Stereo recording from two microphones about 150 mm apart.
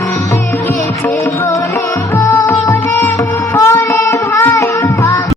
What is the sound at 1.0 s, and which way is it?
Music, 15° left (ahead or behind).